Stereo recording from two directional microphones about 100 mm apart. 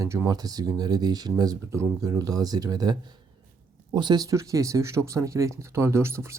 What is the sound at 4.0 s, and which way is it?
Speech, 45° right (ahead or behind).